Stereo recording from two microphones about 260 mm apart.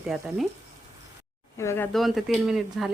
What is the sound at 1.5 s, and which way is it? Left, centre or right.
Speech, centre.